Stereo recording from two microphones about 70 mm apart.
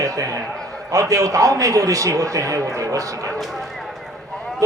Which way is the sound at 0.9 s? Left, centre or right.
Right.